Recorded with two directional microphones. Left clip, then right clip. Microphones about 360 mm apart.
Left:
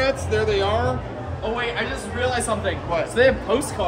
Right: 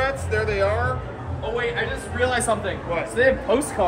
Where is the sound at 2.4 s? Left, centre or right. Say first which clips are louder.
Right 1 dB; centre.